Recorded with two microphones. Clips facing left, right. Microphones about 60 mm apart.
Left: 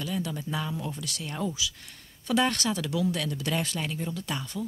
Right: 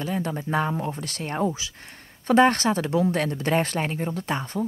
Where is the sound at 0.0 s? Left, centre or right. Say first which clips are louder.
Right 4 dB; right.